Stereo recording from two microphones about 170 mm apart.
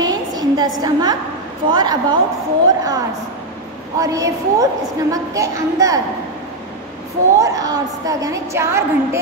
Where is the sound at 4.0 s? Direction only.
20° right (ahead or behind).